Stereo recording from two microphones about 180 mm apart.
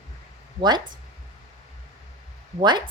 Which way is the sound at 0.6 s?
25° right (ahead or behind).